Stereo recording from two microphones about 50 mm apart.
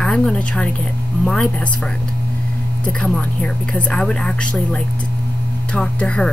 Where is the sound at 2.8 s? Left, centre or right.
Centre.